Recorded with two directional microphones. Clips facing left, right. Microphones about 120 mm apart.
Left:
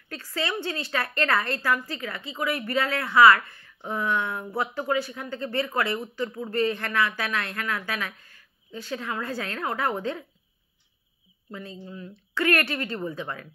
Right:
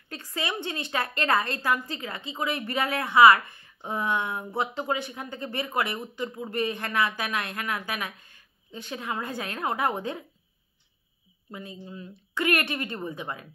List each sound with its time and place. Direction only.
0.1 s a woman's voice: 20° right (ahead or behind)
11.5 s a woman's voice: 20° right (ahead or behind)